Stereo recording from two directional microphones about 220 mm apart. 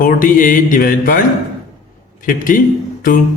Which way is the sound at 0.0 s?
40° left (ahead or behind).